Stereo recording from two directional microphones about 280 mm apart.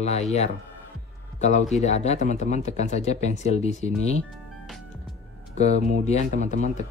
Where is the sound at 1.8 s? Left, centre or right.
Left.